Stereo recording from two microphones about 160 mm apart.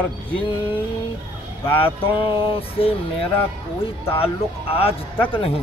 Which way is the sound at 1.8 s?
35° left (ahead or behind).